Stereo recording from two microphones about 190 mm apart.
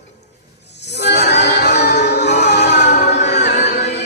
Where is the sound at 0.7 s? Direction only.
65° left (ahead or behind).